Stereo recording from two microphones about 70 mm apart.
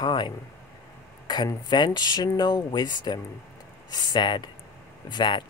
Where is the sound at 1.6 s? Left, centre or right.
Left.